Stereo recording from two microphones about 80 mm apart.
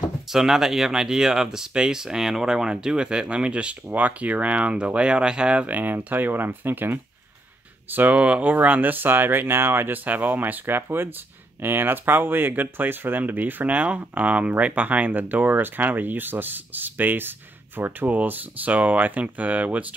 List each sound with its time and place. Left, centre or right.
0.3 s speech: centre